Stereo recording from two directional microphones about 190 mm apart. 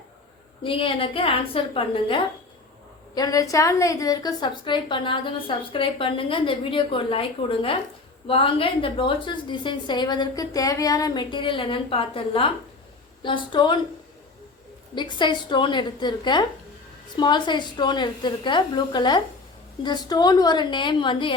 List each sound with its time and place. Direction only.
0.6 s a woman's voice: 30° left (ahead or behind)
14.9 s a woman's voice: 25° left (ahead or behind)